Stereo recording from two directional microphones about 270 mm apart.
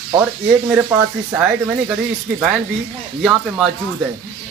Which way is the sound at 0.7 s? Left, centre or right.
Centre.